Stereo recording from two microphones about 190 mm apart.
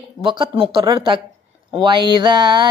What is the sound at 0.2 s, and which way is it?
Music, 25° right (ahead or behind).